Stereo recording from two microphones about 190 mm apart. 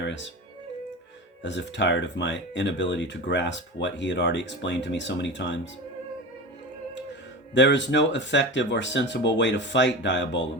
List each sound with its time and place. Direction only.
0.0 s music: 70° left (ahead or behind)
1.4 s speech: 70° left (ahead or behind)
7.5 s speech: 70° left (ahead or behind)